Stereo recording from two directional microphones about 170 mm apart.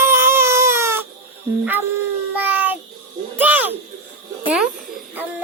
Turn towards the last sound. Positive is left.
turn(degrees=-5)  # may be behind; listen again after turning